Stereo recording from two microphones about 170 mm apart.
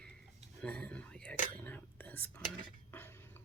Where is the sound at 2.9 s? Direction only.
10° left (ahead or behind).